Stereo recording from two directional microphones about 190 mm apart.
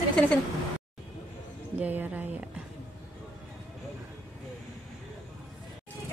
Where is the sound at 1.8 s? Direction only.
10° right (ahead or behind).